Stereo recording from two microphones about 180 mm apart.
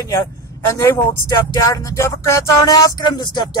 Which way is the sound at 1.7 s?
15° left (ahead or behind).